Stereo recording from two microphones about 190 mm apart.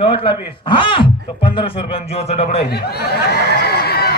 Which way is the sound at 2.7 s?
55° left (ahead or behind).